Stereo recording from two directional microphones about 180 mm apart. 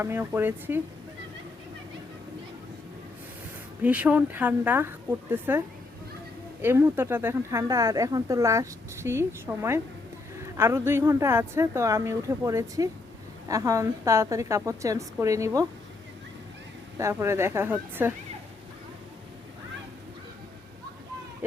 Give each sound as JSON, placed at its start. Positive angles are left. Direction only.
{"t": 0.0, "sound": "a woman's voice", "side_deg": -15}
{"t": 3.8, "sound": "a woman's voice", "side_deg": -10}
{"t": 17.0, "sound": "a woman's voice", "side_deg": -15}